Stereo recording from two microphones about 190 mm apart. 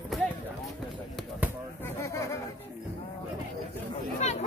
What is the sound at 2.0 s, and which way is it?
Chatter, 15° left (ahead or behind).